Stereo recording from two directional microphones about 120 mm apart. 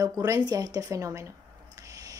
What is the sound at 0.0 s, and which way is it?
A woman's voice, 30° right (ahead or behind).